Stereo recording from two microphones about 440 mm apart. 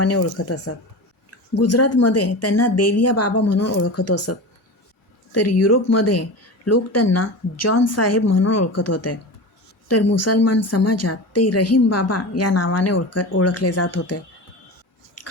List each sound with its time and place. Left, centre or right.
0.0 s speech: left
15.2 s biting: left